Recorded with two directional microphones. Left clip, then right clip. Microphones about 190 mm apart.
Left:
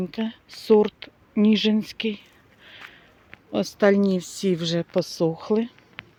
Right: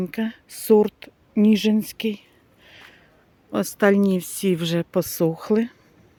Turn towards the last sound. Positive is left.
turn(degrees=-50)  # may be behind; listen again after turning